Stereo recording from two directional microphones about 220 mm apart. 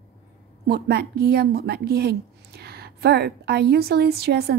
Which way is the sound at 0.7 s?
50° right (ahead or behind).